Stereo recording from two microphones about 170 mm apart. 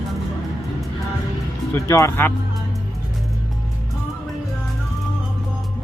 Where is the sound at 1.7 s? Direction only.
15° left (ahead or behind).